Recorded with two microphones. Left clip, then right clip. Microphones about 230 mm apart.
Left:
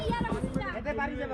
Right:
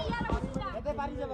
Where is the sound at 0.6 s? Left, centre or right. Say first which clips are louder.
Left 1 dB; centre.